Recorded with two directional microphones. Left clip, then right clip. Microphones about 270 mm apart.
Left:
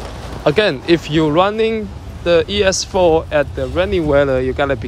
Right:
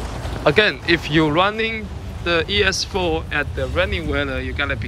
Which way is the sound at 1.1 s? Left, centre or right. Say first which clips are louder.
Left 3 dB; centre.